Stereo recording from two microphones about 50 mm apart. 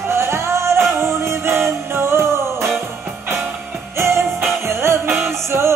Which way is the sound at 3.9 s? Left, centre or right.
Right.